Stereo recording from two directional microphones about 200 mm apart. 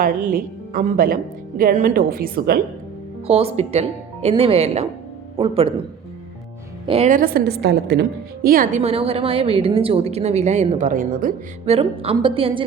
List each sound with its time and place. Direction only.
0.0 s a woman's voice: 40° right (ahead or behind)
3.2 s a woman's voice: 30° right (ahead or behind)
6.8 s speech: 30° right (ahead or behind)
7.1 s a woman's voice: 45° right (ahead or behind); by 12.6 s 25° right (ahead or behind)